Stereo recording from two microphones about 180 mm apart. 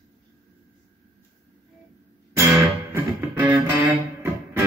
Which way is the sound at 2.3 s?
15° right (ahead or behind).